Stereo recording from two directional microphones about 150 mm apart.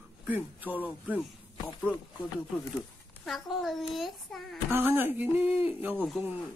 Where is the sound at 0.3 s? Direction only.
10° right (ahead or behind).